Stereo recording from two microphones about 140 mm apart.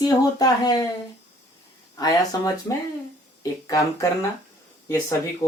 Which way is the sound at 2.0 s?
25° left (ahead or behind).